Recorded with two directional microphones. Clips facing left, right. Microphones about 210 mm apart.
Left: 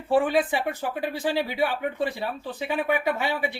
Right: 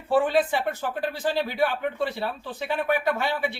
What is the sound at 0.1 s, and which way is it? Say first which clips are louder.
Speech: even; 15° left (ahead or behind).